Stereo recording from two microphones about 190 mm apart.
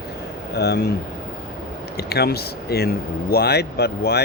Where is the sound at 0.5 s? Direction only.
60° left (ahead or behind).